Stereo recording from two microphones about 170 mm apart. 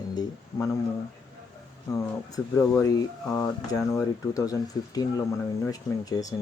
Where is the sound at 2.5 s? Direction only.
20° left (ahead or behind).